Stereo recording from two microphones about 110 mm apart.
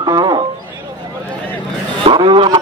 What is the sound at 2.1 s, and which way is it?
Vehicle, 45° right (ahead or behind).